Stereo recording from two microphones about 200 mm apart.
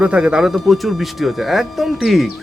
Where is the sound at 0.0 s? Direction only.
5° right (ahead or behind).